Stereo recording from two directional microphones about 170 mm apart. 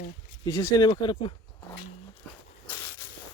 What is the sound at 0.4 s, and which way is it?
Speech, 25° left (ahead or behind).